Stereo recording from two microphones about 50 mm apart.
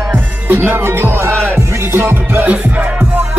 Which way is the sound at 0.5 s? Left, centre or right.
Right.